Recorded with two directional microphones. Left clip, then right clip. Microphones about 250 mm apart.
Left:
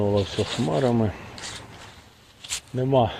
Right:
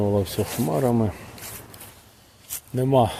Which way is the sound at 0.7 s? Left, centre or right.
Centre.